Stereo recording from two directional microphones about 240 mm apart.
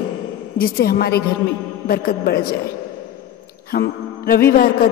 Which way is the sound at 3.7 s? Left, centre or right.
Left.